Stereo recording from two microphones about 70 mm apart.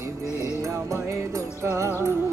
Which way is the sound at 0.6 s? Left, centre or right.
Right.